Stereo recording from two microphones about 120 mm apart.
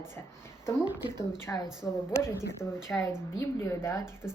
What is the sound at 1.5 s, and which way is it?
Speech, 15° left (ahead or behind).